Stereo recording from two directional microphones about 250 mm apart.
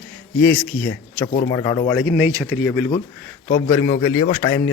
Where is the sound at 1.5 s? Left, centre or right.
Centre.